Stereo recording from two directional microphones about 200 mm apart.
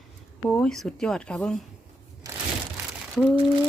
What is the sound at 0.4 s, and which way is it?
Speech, 5° left (ahead or behind).